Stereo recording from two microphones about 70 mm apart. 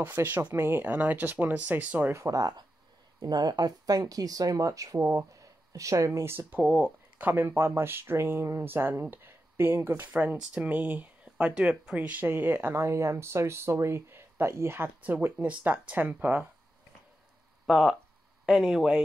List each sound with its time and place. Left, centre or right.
0.0 s speech: right
2.1 s speech: right
3.2 s speech: right
6.2 s speech: right
12.3 s speech: right
15.0 s speech: right
17.6 s speech: centre